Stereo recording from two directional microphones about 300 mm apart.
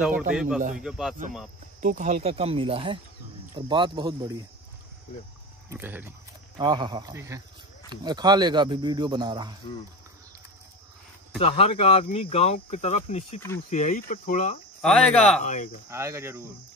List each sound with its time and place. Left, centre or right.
0.0 s a man's voice: centre
1.8 s speech: right
5.7 s speech: centre
11.3 s speech: centre
14.8 s a man's voice: centre
15.4 s speech: left
15.9 s speech: centre